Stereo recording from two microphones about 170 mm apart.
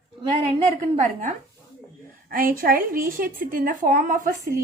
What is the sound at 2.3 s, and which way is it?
A woman's voice, 55° right (ahead or behind).